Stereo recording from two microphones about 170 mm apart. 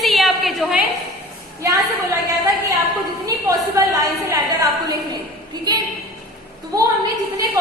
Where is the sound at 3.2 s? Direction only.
15° right (ahead or behind).